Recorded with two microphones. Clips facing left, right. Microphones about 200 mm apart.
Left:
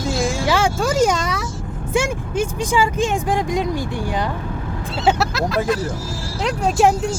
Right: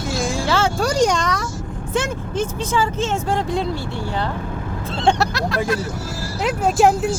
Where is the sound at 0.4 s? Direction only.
15° left (ahead or behind).